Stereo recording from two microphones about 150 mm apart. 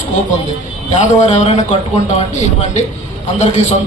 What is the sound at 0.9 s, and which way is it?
Speech, 50° left (ahead or behind).